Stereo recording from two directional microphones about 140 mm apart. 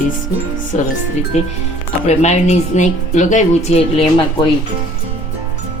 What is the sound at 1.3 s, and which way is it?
Speech, 55° left (ahead or behind).